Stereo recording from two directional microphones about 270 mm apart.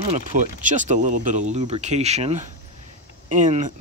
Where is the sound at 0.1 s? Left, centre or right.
Right.